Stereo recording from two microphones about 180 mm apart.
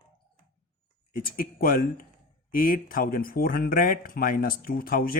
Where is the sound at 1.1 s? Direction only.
50° left (ahead or behind).